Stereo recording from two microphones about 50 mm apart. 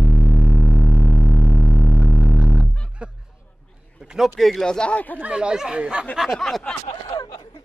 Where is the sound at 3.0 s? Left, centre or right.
Right.